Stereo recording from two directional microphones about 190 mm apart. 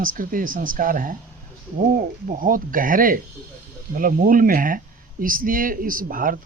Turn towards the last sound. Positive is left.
turn(degrees=-45)  # may be behind; listen again after turning